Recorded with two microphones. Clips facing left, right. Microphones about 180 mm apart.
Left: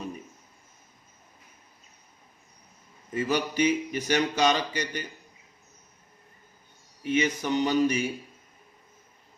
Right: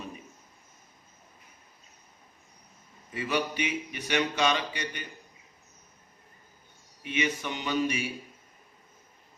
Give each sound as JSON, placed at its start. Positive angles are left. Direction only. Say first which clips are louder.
{"t": 3.2, "sound": "speech", "louder": "left 4 dB", "side_deg": 40}
{"t": 7.0, "sound": "speech", "louder": "left 5 dB", "side_deg": 40}